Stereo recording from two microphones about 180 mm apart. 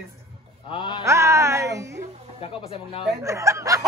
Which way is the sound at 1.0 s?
15° right (ahead or behind).